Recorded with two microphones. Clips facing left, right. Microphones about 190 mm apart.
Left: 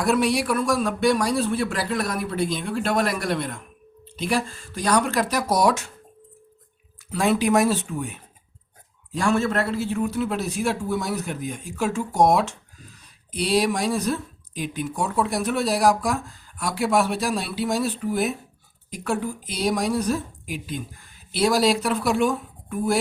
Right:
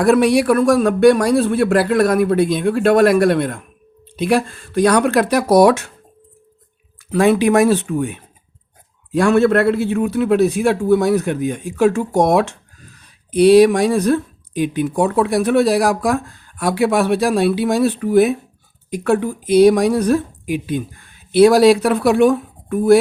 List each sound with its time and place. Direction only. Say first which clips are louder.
0.0 s speech: right 8 dB; 60° right (ahead or behind)
7.1 s speech: right 7 dB; 60° right (ahead or behind)